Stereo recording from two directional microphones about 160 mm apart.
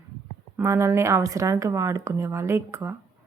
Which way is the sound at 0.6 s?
20° right (ahead or behind).